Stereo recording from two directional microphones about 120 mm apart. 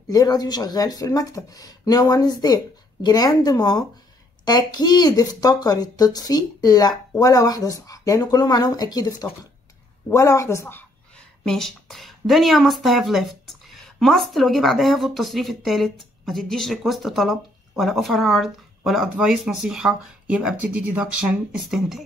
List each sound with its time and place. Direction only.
0.1 s speech: 35° left (ahead or behind); by 11.2 s 15° left (ahead or behind)
11.4 s speech: 5° left (ahead or behind)